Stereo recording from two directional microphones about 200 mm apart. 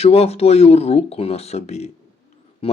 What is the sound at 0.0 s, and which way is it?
Speech, 30° left (ahead or behind).